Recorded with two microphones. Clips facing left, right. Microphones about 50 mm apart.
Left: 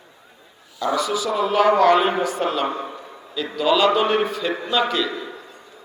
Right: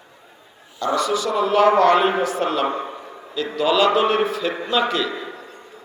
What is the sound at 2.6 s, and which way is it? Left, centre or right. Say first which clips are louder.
Speech: right 2 dB; right.